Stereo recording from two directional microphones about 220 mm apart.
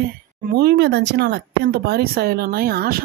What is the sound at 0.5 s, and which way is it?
Speech, 45° right (ahead or behind).